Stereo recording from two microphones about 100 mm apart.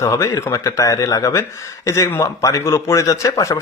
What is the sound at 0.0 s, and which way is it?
A man's voice, 30° left (ahead or behind).